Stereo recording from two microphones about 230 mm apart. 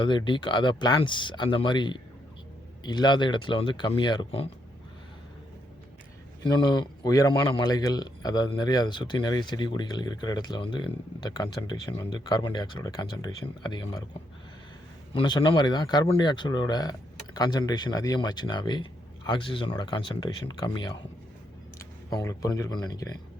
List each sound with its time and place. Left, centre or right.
0.0 s speech: centre
6.4 s speech: centre
15.1 s speech: left